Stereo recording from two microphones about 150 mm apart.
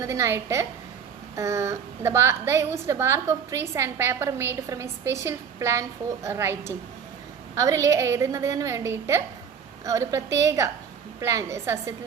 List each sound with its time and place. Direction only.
0.0 s a woman's voice: 20° right (ahead or behind)